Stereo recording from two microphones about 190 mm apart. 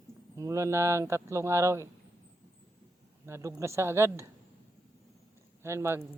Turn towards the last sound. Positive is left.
turn(degrees=-15)  # may be behind; listen again after turning